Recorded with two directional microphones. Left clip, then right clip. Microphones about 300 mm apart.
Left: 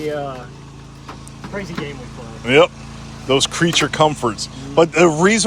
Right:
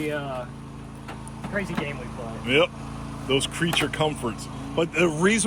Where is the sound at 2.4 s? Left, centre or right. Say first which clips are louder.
Left 9 dB; centre.